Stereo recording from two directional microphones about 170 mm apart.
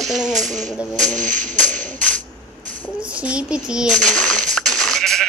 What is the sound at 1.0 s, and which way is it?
Music, 50° right (ahead or behind).